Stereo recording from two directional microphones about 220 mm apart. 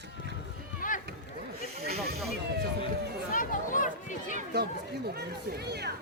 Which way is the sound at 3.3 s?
35° left (ahead or behind).